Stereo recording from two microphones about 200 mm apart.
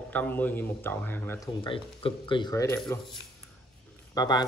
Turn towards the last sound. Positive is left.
turn(degrees=20)  # may be behind; listen again after turning